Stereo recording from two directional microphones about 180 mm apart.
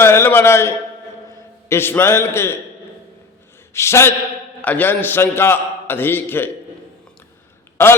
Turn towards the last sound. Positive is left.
turn(degrees=10)  # may be behind; listen again after turning